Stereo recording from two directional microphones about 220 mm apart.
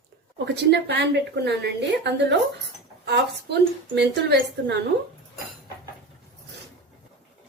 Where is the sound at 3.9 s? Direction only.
50° right (ahead or behind).